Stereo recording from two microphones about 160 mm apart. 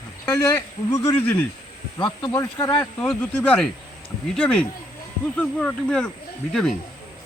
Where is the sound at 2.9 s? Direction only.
10° left (ahead or behind).